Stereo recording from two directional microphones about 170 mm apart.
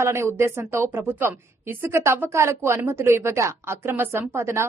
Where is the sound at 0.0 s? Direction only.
15° right (ahead or behind).